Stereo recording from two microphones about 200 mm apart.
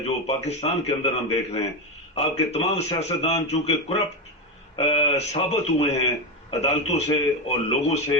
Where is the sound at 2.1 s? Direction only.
30° left (ahead or behind).